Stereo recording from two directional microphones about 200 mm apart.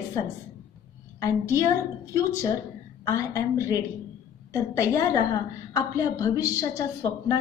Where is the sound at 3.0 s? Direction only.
15° left (ahead or behind).